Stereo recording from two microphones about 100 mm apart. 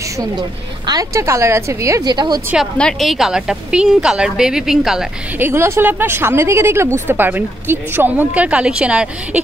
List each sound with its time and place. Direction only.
0.2 s a woman's voice: 40° right (ahead or behind)
1.1 s speech: 30° right (ahead or behind)
2.0 s speech: 45° right (ahead or behind)
2.8 s a woman's voice: 5° left (ahead or behind)
5.4 s speech: 25° right (ahead or behind)